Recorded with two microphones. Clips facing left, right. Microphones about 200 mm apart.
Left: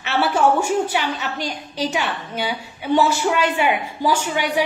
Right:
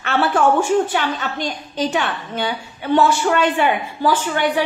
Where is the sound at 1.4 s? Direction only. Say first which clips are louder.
Right 2 dB; 10° left (ahead or behind).